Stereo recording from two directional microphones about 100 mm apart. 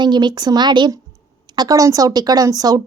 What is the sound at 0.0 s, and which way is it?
Speech, 45° right (ahead or behind).